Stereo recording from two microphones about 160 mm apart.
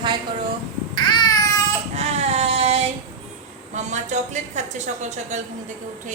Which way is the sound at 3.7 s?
45° right (ahead or behind).